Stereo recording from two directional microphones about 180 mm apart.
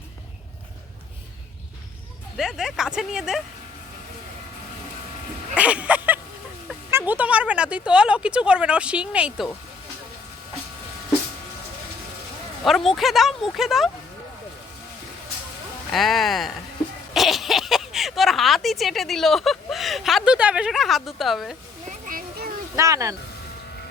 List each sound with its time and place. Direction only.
2.4 s speech: 5° right (ahead or behind)
5.5 s speech: 5° right (ahead or behind)
12.6 s speech: centre (ahead or behind)
15.9 s speech: centre (ahead or behind)
21.8 s a sound: 45° right (ahead or behind)
22.7 s speech: 15° right (ahead or behind)